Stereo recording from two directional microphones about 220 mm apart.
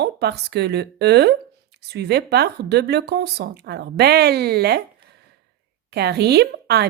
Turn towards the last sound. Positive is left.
turn(degrees=-45)  # may be behind; listen again after turning